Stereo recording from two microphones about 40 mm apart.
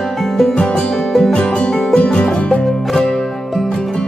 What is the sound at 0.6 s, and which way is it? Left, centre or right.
Music, left.